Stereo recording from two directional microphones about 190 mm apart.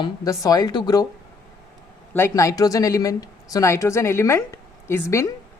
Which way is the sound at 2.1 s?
15° left (ahead or behind).